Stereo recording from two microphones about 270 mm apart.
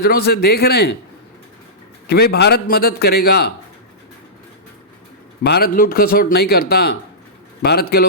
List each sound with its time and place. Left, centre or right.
0.0 s speech: left
2.0 s speech: left
5.4 s speech: left